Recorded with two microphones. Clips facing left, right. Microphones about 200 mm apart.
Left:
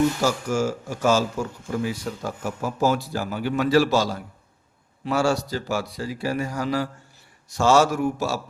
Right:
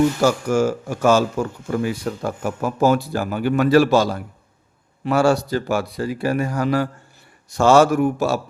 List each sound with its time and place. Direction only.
0.2 s speech: 60° right (ahead or behind)